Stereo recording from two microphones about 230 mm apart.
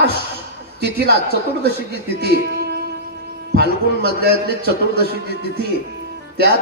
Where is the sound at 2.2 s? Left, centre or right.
Right.